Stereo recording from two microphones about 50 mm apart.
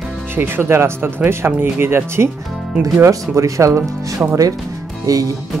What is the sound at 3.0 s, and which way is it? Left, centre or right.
Speech, right.